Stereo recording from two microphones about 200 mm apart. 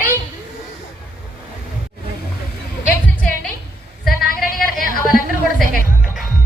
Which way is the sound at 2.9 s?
10° left (ahead or behind).